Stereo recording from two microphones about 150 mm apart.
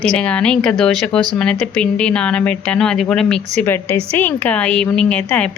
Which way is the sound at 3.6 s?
15° left (ahead or behind).